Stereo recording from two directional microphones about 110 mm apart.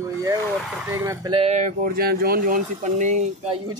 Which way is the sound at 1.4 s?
75° right (ahead or behind).